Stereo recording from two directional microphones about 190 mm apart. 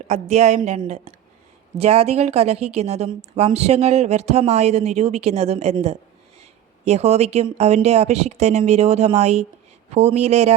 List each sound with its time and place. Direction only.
0.1 s speech: 35° right (ahead or behind)